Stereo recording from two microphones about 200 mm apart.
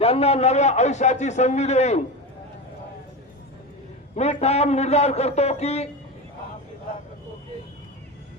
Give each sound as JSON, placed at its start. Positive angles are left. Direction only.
{"t": 0.0, "sound": "a man's voice", "side_deg": 30}
{"t": 4.1, "sound": "a man's voice", "side_deg": 35}